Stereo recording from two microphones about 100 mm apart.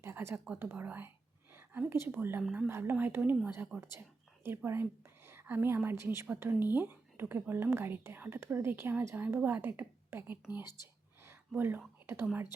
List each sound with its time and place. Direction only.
0.0 s whispering: 25° right (ahead or behind)
0.6 s a woman's voice: 20° right (ahead or behind)
11.2 s a sound: 25° right (ahead or behind)
12.0 s speech: 20° right (ahead or behind)